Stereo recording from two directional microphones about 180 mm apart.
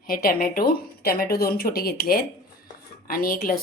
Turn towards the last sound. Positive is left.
turn(degrees=55)  # may be behind; listen again after turning